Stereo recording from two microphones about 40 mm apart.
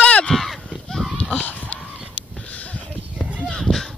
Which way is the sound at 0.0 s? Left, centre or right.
Left.